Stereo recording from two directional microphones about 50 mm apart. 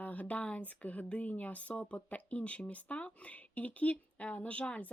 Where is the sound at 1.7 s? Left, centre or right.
Left.